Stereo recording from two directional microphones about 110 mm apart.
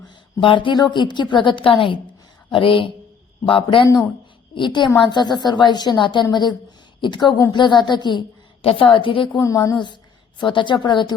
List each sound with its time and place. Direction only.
0.3 s a woman's voice: 50° left (ahead or behind)
9.4 s speech: 30° left (ahead or behind)
9.7 s a woman's voice: 45° left (ahead or behind)